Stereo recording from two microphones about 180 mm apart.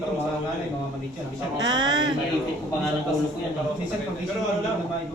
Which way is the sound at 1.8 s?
25° right (ahead or behind).